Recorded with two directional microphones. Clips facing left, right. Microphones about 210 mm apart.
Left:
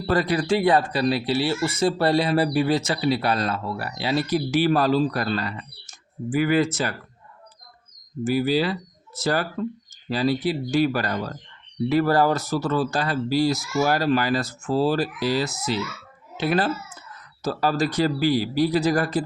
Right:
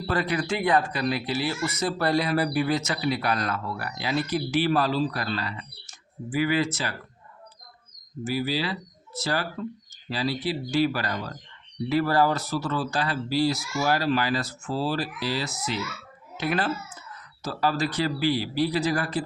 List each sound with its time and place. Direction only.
0.1 s speech: 35° left (ahead or behind)
8.2 s speech: 45° left (ahead or behind)